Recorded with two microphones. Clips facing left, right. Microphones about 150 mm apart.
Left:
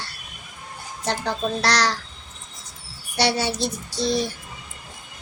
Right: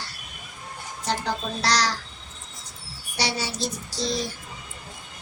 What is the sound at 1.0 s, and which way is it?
Child singing, 60° left (ahead or behind).